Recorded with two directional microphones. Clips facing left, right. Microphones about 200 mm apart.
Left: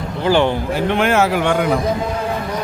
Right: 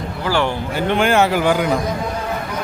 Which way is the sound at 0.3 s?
20° left (ahead or behind).